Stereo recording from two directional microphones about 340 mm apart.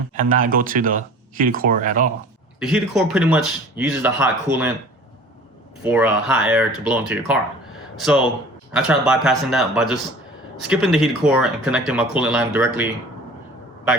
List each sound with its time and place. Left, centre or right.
0.1 s speech: right
2.6 s speech: centre
5.8 s speech: centre
8.0 s speech: centre